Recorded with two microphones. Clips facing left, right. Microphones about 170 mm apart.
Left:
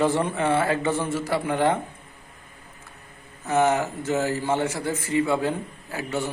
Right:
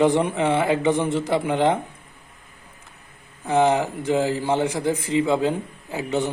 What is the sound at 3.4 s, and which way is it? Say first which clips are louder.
A man's voice: right 2 dB; 15° right (ahead or behind).